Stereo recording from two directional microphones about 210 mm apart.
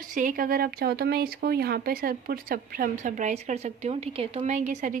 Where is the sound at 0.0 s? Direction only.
40° right (ahead or behind).